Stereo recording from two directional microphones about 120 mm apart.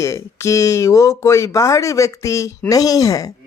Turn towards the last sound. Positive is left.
turn(degrees=30)  # may be behind; listen again after turning